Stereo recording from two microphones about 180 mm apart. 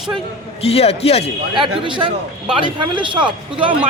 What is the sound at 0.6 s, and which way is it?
Speech, 35° left (ahead or behind).